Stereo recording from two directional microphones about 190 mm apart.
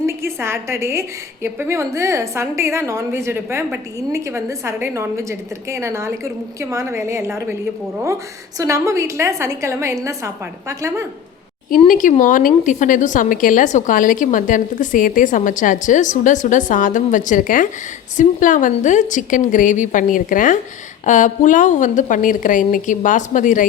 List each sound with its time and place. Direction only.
0.0 s a woman's voice: 15° right (ahead or behind)
8.5 s a woman's voice: 15° right (ahead or behind)
11.7 s a woman's voice: 45° left (ahead or behind)